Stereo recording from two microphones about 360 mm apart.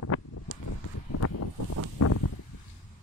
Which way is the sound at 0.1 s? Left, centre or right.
Left.